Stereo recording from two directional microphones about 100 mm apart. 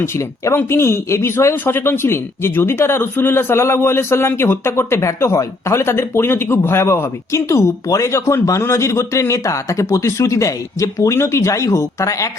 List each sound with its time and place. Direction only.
0.0 s a man's voice: 30° left (ahead or behind)